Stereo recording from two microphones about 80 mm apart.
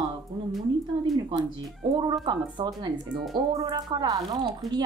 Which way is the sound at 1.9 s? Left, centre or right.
Right.